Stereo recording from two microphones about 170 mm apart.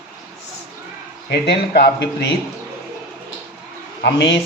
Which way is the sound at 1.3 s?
70° left (ahead or behind).